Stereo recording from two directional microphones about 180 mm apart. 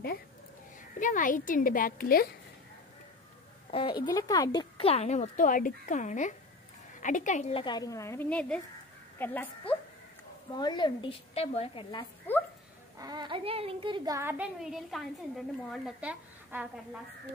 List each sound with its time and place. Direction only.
0.9 s a woman's voice: 45° left (ahead or behind)
3.7 s a woman's voice: 30° left (ahead or behind)
7.6 s a woman's voice: 20° left (ahead or behind)
10.5 s a woman's voice: 25° left (ahead or behind)
13.0 s speech: 25° right (ahead or behind)
14.4 s a woman's voice: centre (ahead or behind)